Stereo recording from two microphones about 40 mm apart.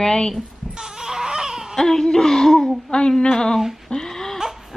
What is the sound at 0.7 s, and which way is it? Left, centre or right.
Baby cry, centre.